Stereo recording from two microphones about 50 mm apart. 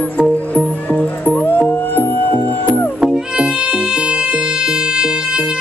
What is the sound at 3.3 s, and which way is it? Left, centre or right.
Music, centre.